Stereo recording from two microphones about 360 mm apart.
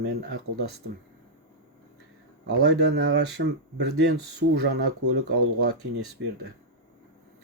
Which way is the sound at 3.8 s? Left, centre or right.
Right.